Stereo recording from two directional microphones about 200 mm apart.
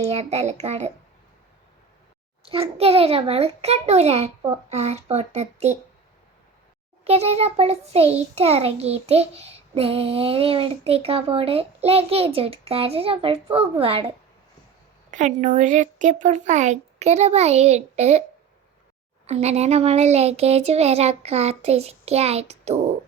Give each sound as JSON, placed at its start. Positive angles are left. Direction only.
{"t": 0.0, "sound": "speech", "side_deg": -30}
{"t": 2.4, "sound": "speech", "side_deg": -30}
{"t": 7.0, "sound": "a child's voice", "side_deg": -30}
{"t": 15.1, "sound": "speech", "side_deg": -40}
{"t": 19.2, "sound": "speech", "side_deg": -30}